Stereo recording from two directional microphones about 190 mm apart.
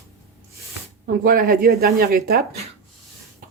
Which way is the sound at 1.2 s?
50° right (ahead or behind).